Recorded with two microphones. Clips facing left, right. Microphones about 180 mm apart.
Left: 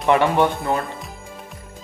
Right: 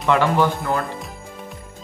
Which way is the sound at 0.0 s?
20° left (ahead or behind).